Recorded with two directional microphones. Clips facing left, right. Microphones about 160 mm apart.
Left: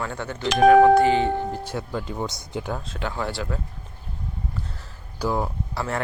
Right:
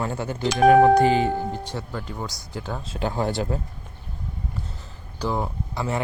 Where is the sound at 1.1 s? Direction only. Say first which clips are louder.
Even; 25° left (ahead or behind).